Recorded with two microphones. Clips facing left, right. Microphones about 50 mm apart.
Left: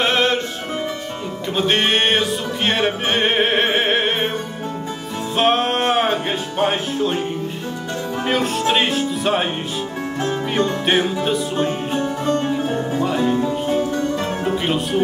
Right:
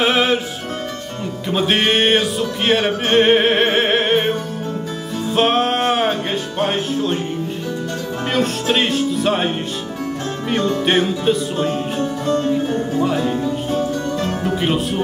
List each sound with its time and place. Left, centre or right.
0.0 s music: centre
1.5 s music: centre
5.3 s music: centre
8.3 s music: centre
10.9 s music: centre
12.0 s music: left
13.0 s music: centre
13.7 s music: centre